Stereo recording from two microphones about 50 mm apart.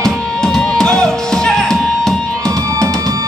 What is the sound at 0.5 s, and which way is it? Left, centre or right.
Music, centre.